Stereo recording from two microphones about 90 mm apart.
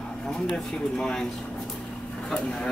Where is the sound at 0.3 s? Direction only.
5° left (ahead or behind).